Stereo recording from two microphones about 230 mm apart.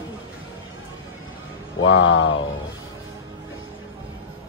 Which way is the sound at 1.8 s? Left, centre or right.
Left.